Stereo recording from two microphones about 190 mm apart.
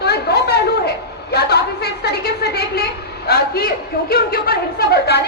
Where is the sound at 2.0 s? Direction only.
60° left (ahead or behind).